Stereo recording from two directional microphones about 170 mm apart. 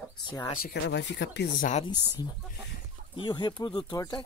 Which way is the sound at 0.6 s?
75° left (ahead or behind).